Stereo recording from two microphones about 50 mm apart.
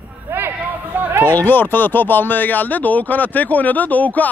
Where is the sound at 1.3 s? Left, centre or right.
Left.